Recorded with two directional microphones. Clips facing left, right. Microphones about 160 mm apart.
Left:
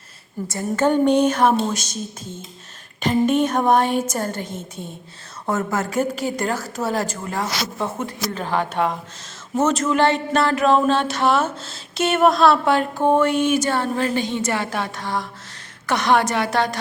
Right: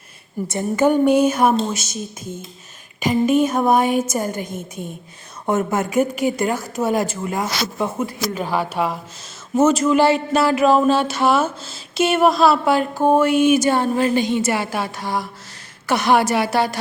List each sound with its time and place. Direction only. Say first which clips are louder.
0.4 s a woman's voice: right 3 dB; 20° right (ahead or behind)
0.9 s a woman's voice: right 1 dB; 5° right (ahead or behind)